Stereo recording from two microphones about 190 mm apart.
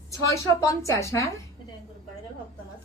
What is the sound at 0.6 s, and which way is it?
Speech, 15° left (ahead or behind).